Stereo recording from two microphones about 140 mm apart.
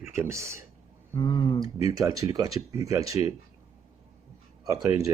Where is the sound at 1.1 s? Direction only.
20° left (ahead or behind).